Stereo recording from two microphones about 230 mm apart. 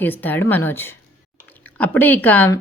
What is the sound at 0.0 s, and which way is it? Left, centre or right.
A woman's voice, centre.